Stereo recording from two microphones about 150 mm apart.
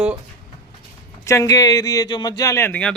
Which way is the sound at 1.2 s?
20° left (ahead or behind).